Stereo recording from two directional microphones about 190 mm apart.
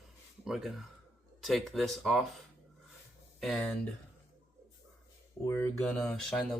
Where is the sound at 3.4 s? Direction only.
Centre (ahead or behind).